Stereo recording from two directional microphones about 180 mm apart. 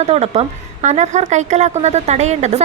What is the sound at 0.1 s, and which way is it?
Speech, 35° right (ahead or behind).